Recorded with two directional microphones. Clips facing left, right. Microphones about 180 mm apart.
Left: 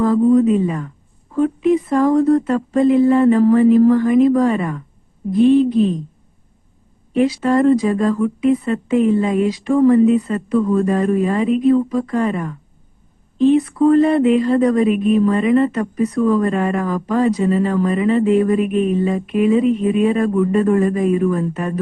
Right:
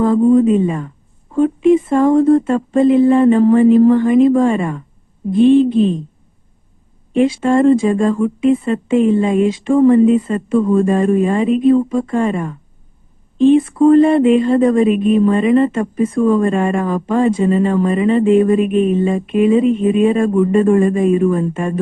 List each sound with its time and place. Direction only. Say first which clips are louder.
0.0 s speech: right 2 dB; 25° right (ahead or behind)
7.1 s speech: right 2 dB; 25° right (ahead or behind)